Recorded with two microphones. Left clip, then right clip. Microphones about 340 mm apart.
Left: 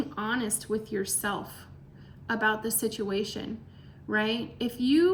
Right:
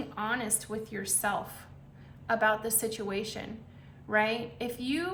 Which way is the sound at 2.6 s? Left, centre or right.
Centre.